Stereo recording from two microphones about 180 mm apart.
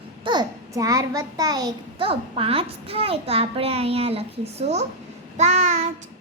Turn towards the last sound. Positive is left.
turn(degrees=-40)  # may be behind; listen again after turning